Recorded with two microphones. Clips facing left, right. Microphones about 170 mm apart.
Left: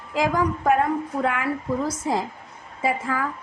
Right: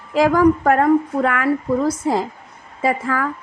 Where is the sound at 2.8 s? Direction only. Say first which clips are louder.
Right 4 dB; 70° right (ahead or behind).